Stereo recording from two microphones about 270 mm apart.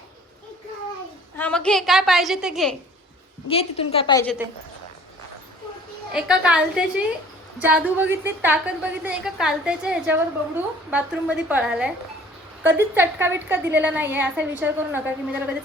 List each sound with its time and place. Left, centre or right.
1.4 s a woman's voice: centre
3.5 s a woman's voice: left
6.1 s a woman's voice: centre